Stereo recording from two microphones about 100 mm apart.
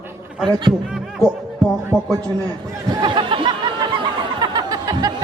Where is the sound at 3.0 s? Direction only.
55° right (ahead or behind).